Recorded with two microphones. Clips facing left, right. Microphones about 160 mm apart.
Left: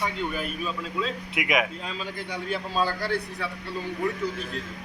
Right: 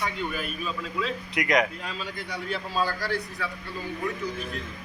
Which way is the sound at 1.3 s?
5° left (ahead or behind).